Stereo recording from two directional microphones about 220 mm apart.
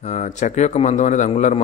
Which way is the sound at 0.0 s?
30° left (ahead or behind).